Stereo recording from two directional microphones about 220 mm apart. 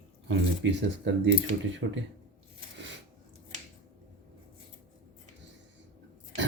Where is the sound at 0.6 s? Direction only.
55° right (ahead or behind).